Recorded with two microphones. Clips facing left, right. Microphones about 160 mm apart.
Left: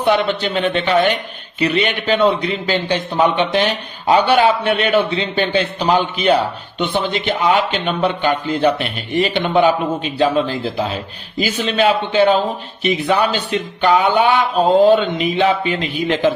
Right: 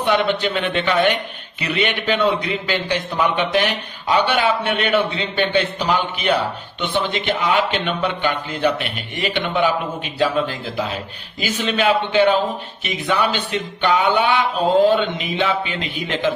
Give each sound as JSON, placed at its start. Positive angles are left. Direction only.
{"t": 0.0, "sound": "speech", "side_deg": 35}